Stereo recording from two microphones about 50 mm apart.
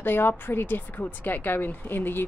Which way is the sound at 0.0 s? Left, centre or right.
Left.